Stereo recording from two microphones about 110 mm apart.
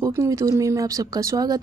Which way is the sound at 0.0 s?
25° right (ahead or behind).